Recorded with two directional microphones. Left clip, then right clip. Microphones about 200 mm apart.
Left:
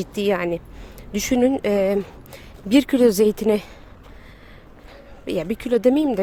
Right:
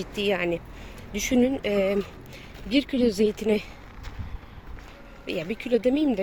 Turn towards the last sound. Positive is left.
turn(degrees=35)  # may be behind; listen again after turning